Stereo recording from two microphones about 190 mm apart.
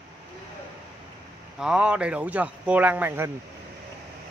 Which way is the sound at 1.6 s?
5° right (ahead or behind).